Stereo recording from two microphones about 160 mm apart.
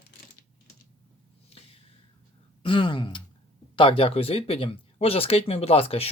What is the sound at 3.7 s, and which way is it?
Speech, 35° left (ahead or behind).